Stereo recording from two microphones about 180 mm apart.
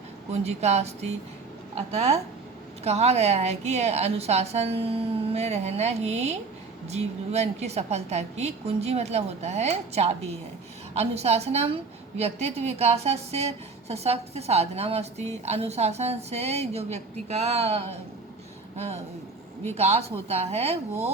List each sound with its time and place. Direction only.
0.3 s a woman's voice: 35° right (ahead or behind)
19.7 s a woman's voice: 35° right (ahead or behind)